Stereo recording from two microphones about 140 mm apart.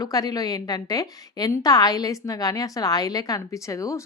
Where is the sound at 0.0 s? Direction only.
25° left (ahead or behind).